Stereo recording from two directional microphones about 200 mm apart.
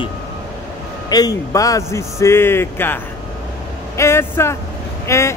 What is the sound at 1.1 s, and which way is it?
Speech, 15° left (ahead or behind).